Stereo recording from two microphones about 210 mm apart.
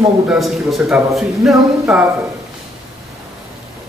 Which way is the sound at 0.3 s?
Centre (ahead or behind).